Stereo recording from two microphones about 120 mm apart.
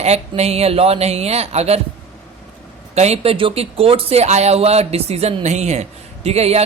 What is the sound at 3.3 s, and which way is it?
Speech, 50° right (ahead or behind).